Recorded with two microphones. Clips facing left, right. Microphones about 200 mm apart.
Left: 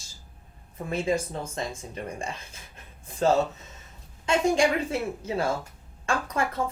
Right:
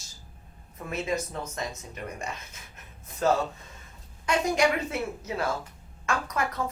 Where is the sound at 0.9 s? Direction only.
30° left (ahead or behind).